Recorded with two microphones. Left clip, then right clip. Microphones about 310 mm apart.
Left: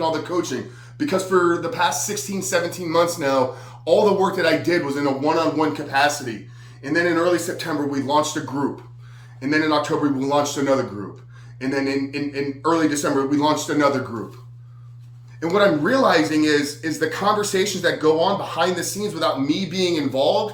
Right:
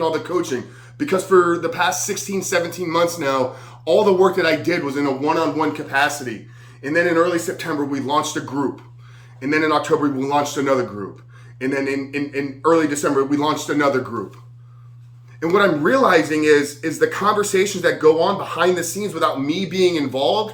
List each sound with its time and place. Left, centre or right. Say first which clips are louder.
0.0 s speech: right 2 dB; centre
15.4 s speech: right 1 dB; centre